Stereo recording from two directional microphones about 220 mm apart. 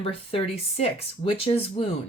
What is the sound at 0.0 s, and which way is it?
Speech, 25° left (ahead or behind).